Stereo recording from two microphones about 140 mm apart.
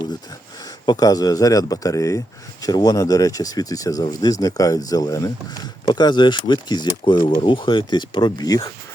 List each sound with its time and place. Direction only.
0.9 s a man's voice: 25° left (ahead or behind)